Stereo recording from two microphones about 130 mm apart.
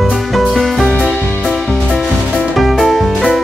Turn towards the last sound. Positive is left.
turn(degrees=0)  # may be behind; listen again after turning